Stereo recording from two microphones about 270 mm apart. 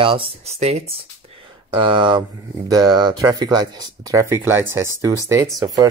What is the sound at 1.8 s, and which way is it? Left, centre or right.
Speech, centre.